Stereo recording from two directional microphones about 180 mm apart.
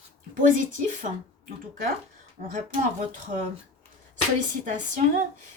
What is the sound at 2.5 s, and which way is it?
Speech, 40° right (ahead or behind).